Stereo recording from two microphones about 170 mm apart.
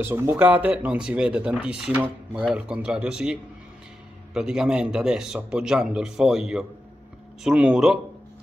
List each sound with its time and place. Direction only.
0.0 s a man's voice: 15° right (ahead or behind)